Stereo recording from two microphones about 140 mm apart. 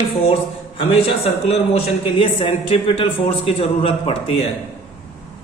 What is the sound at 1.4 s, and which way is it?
A man's voice, 45° left (ahead or behind).